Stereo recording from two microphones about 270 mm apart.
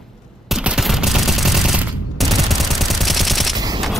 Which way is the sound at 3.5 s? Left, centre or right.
Centre.